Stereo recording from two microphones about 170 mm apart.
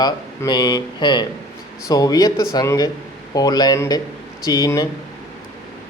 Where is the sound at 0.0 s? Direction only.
25° left (ahead or behind).